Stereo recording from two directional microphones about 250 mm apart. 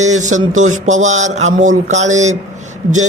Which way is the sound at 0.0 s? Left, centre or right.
Right.